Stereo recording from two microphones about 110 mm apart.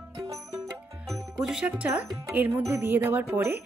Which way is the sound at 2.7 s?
20° right (ahead or behind).